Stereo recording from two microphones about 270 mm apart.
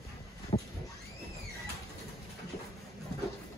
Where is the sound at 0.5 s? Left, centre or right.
Left.